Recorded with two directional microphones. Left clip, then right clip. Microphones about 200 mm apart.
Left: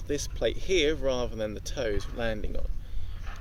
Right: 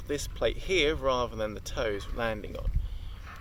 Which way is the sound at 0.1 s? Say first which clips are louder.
Left 1 dB; 5° left (ahead or behind).